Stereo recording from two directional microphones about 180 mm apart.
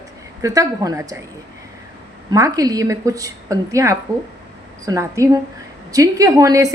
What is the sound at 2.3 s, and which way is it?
A woman's voice, 20° right (ahead or behind).